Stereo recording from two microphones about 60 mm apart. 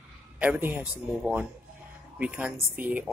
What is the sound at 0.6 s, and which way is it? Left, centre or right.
Speech, right.